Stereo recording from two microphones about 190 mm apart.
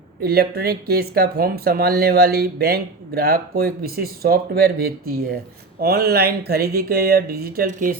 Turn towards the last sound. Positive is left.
turn(degrees=-45)  # may be behind; listen again after turning